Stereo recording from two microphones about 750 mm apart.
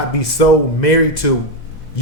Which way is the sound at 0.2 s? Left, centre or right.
Left.